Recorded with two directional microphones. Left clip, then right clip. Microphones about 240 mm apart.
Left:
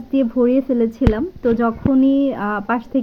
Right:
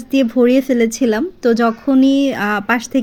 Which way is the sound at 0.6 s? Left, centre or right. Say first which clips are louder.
Right 3 dB; right.